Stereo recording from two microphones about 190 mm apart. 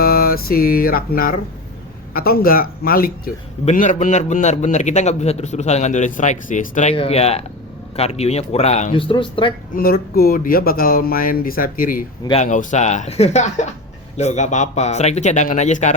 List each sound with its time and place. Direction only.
0.0 s music: 50° left (ahead or behind)
2.1 s speech: 50° left (ahead or behind)
3.7 s a man's voice: 40° left (ahead or behind)
9.7 s a man's voice: 50° left (ahead or behind)